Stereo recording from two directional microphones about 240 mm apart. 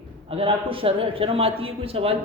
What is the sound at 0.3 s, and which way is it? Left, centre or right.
A man's voice, right.